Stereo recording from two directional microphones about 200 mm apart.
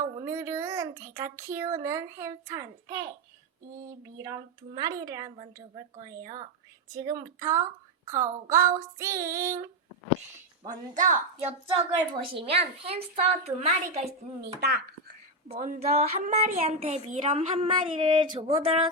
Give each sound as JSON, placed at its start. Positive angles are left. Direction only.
{"t": 0.2, "sound": "a woman's voice", "side_deg": -15}
{"t": 10.7, "sound": "a woman's voice", "side_deg": -40}
{"t": 14.4, "sound": "speech", "side_deg": -55}
{"t": 15.5, "sound": "a child's voice", "side_deg": -45}